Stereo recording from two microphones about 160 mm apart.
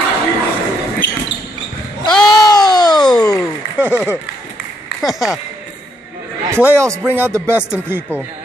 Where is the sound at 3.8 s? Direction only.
15° left (ahead or behind).